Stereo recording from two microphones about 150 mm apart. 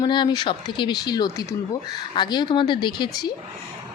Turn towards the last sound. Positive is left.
turn(degrees=25)  # may be behind; listen again after turning